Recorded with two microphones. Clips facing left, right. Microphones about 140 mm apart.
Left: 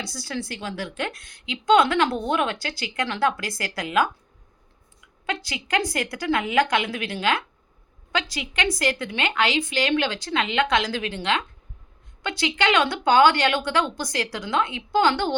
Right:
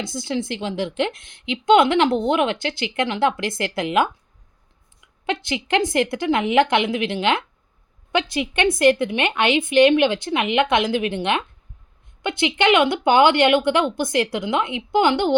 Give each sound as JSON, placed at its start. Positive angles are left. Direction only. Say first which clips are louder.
{"t": 0.0, "sound": "a woman's voice", "louder": "right 6 dB", "side_deg": -20}
{"t": 5.2, "sound": "a woman's voice", "louder": "right 6 dB", "side_deg": -25}